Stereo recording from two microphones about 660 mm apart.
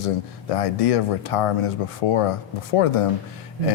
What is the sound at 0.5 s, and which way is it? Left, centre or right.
Speech, left.